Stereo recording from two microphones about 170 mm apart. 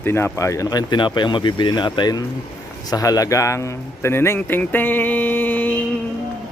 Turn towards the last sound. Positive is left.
turn(degrees=10)  # may be behind; listen again after turning